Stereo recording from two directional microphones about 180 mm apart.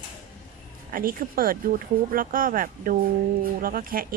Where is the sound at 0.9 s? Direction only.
50° right (ahead or behind).